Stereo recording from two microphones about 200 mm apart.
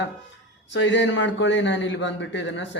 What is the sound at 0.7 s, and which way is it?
A man's voice, 65° left (ahead or behind).